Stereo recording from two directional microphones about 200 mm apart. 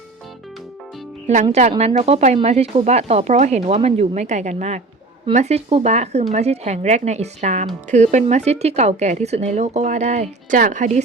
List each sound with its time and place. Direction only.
1.9 s speech: 35° right (ahead or behind)